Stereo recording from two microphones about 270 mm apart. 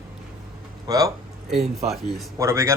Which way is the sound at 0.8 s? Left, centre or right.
Centre.